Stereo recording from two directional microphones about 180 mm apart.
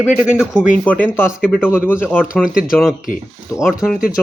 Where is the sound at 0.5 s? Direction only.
10° left (ahead or behind).